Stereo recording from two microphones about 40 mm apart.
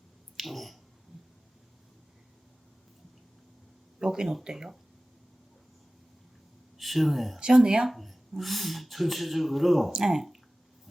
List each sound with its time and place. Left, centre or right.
0.3 s finger snapping: centre
4.0 s speech: centre
6.7 s speech: centre
7.3 s speech: centre
7.9 s speech: centre